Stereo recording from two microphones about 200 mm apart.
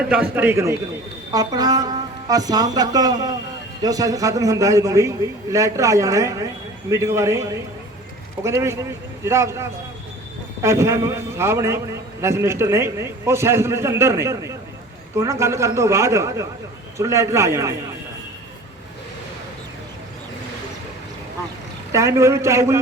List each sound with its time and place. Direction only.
0.1 s a man's voice: 10° right (ahead or behind)
8.4 s a man's voice: 15° right (ahead or behind)
21.9 s a man's voice: 15° right (ahead or behind)